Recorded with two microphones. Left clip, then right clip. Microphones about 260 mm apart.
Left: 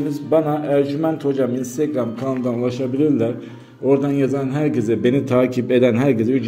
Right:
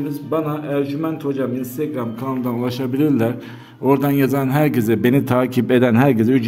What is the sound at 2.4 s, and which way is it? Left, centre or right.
A man's voice, centre.